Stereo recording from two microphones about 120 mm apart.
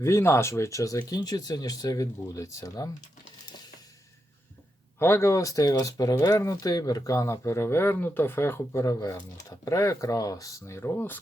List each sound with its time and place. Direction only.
0.0 s speech: 20° left (ahead or behind)
4.9 s speech: 20° left (ahead or behind)